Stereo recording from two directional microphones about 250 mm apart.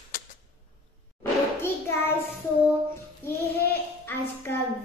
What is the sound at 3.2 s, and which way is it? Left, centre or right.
Child singing, centre.